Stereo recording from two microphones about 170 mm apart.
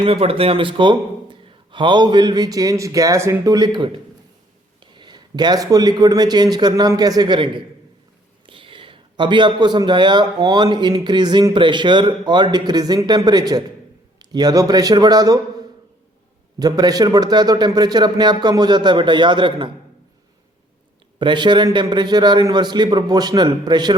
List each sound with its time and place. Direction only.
0.0 s a man's voice: 35° right (ahead or behind)
16.6 s a man's voice: 20° right (ahead or behind)
21.2 s a man's voice: 25° right (ahead or behind)